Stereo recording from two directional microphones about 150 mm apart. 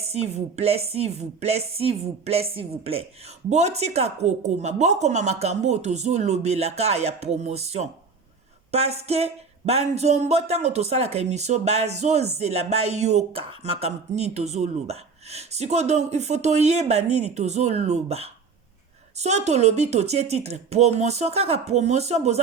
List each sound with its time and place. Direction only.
0.0 s speech: 45° right (ahead or behind)